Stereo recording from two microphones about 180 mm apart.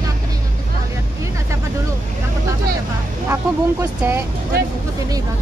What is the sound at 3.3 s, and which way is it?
Vehicle, 15° right (ahead or behind).